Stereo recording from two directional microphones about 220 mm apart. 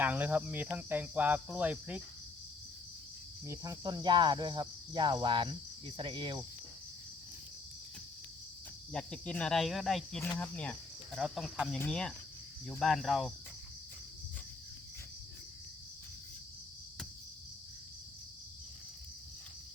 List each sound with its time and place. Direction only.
0.0 s speech: 10° right (ahead or behind)
3.4 s cricket: 15° right (ahead or behind)
8.9 s speech: centre (ahead or behind)